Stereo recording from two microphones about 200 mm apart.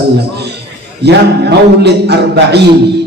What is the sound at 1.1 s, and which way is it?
A man's voice, 55° right (ahead or behind).